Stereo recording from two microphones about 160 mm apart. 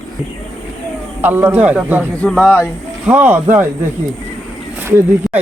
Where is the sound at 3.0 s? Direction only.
10° right (ahead or behind).